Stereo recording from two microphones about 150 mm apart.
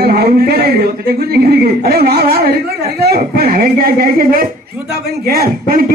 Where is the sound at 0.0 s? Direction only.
90° right.